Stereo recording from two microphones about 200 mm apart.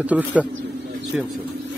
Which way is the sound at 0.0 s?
5° right (ahead or behind).